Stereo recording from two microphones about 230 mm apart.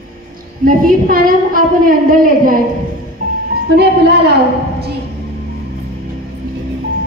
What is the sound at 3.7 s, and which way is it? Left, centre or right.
Speech, right.